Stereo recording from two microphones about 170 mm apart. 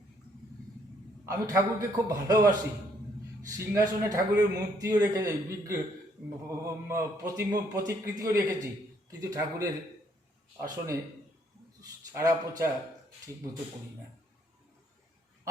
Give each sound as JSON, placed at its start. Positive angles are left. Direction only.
{"t": 1.2, "sound": "a man's voice", "side_deg": -20}
{"t": 6.8, "sound": "a man's voice", "side_deg": -15}